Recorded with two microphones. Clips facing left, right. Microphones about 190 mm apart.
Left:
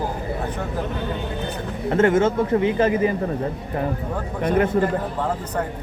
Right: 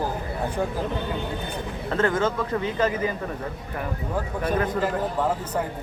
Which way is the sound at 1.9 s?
25° left (ahead or behind).